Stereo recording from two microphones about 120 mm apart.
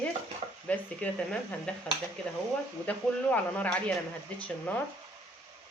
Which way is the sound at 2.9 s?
10° left (ahead or behind).